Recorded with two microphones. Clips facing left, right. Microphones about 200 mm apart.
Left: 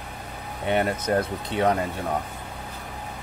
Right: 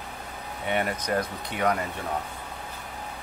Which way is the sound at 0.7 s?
25° left (ahead or behind).